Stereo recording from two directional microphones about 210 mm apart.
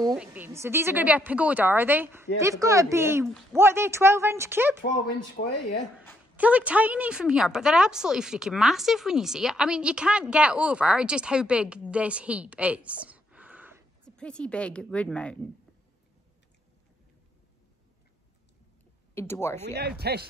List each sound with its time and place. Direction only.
0.1 s a woman's voice: 5° right (ahead or behind)
5.4 s speech: 55° left (ahead or behind)
6.3 s a woman's voice: 5° right (ahead or behind)
14.0 s a woman's voice: 5° left (ahead or behind)
19.1 s speech: 10° left (ahead or behind)
19.6 s speech: 50° right (ahead or behind)